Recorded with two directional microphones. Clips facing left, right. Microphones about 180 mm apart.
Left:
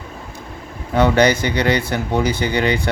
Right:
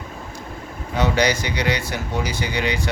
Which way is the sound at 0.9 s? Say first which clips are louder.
Left 6 dB; 55° left (ahead or behind).